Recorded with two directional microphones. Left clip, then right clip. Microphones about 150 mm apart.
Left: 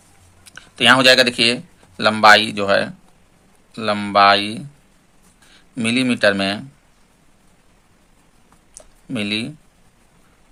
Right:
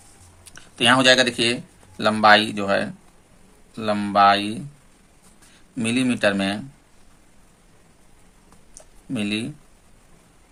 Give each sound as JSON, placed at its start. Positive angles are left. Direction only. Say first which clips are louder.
{"t": 0.4, "sound": "speech", "louder": "left 5 dB", "side_deg": 25}
{"t": 5.7, "sound": "speech", "louder": "left 4 dB", "side_deg": 30}
{"t": 8.7, "sound": "a sound", "louder": "left 3 dB", "side_deg": 30}